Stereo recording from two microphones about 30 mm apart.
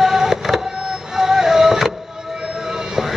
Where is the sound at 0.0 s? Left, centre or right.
Centre.